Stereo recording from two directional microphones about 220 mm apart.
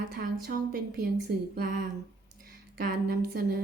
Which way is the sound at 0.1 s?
40° right (ahead or behind).